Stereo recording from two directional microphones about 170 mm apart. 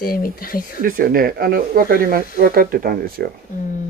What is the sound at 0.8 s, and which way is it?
Speech, 55° right (ahead or behind).